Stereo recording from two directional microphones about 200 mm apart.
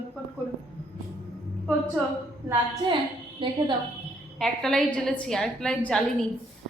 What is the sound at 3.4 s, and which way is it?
Speech, 25° right (ahead or behind).